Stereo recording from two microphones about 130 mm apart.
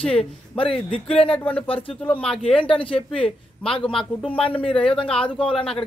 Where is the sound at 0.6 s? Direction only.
45° left (ahead or behind).